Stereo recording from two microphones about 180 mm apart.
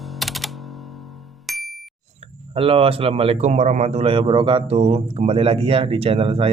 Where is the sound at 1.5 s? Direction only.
Centre (ahead or behind).